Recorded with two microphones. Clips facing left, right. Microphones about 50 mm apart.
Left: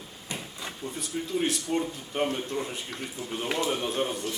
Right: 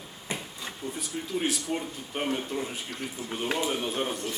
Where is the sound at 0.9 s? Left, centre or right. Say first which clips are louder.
Left 3 dB; centre.